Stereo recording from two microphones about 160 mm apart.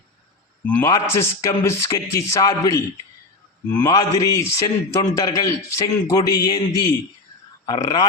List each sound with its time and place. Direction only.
0.6 s a man's voice: 10° left (ahead or behind)
3.8 s a man's voice: 25° left (ahead or behind)